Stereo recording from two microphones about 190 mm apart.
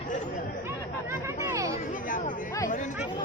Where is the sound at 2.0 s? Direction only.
45° left (ahead or behind).